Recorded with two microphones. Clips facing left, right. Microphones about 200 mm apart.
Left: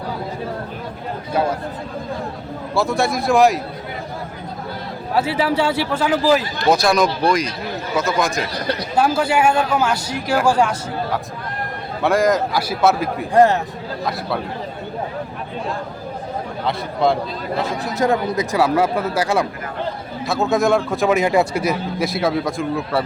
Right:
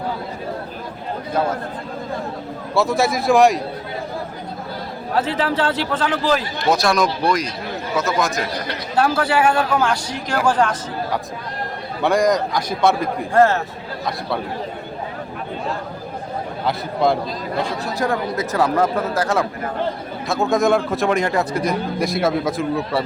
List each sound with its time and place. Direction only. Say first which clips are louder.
2.7 s a man's voice: right 1 dB; centre (ahead or behind)
5.1 s a man's voice: left 2 dB; 10° left (ahead or behind)
9.0 s a man's voice: even; 10° left (ahead or behind)
13.3 s a man's voice: left 2 dB; 15° left (ahead or behind)
16.6 s a man's voice: even; centre (ahead or behind)
17.8 s a man's voice: left 3 dB; 20° left (ahead or behind); by 23.0 s centre (ahead or behind)